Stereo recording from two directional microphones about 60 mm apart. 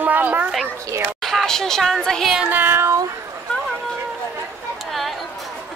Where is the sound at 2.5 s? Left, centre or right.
Right.